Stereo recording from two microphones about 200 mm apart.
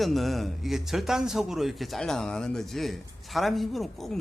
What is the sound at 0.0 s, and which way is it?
Speech, centre (ahead or behind).